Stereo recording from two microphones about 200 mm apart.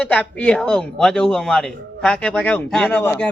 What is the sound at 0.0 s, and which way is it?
A man's voice, 5° left (ahead or behind).